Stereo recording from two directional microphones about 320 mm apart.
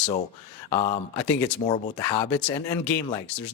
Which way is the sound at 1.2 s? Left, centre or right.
Centre.